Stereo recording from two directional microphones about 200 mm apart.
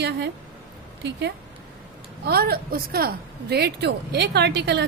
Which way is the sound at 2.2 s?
50° right (ahead or behind).